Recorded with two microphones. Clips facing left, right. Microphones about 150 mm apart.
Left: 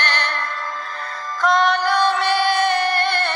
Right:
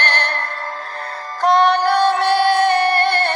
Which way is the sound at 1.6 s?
60° right (ahead or behind).